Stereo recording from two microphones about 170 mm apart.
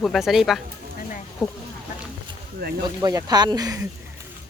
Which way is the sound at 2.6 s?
65° right (ahead or behind).